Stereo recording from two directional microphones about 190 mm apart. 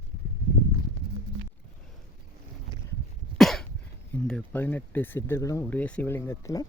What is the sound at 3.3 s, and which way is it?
Cough, centre (ahead or behind).